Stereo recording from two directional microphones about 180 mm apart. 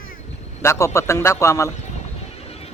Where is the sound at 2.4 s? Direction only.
35° left (ahead or behind).